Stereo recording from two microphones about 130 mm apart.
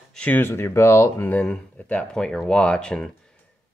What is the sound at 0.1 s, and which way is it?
Speech, 10° left (ahead or behind).